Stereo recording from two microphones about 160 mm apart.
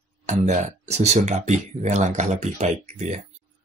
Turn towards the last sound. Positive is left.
turn(degrees=-45)  # may be behind; listen again after turning